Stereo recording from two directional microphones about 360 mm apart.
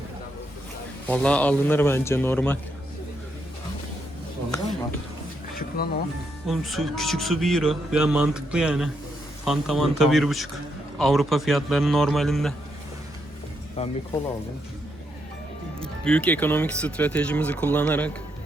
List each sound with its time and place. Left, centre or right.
1.0 s speech: centre
5.5 s music: left
6.5 s speech: centre
13.8 s speech: centre
15.8 s speech: centre